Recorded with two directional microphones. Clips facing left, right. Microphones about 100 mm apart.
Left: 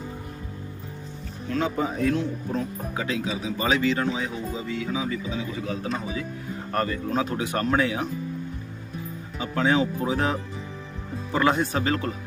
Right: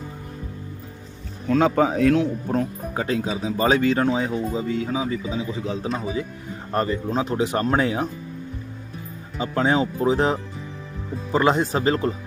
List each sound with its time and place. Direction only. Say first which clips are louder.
1.5 s speech: right 7 dB; 85° right
2.5 s speech: right 4 dB; 45° right (ahead or behind)
9.4 s speech: right 2 dB; 30° right (ahead or behind)